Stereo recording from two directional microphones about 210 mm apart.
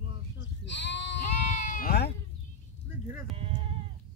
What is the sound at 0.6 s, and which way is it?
Sheep, 55° left (ahead or behind).